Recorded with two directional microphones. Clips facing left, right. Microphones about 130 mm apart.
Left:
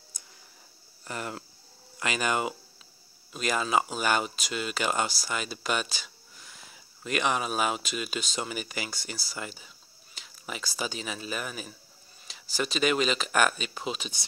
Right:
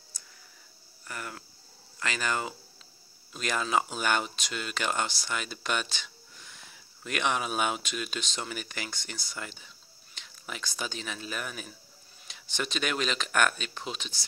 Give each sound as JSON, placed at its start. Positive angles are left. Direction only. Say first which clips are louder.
{"t": 0.1, "sound": "a sound", "louder": "left 1 dB", "side_deg": 15}
{"t": 1.0, "sound": "speech", "louder": "left 4 dB", "side_deg": 25}
{"t": 2.0, "sound": "speech", "louder": "left 3 dB", "side_deg": 15}
{"t": 3.3, "sound": "speech", "louder": "left 2 dB", "side_deg": 5}